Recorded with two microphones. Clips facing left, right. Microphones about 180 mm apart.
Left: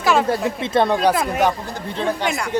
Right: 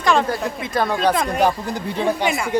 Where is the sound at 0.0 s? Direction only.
5° left (ahead or behind).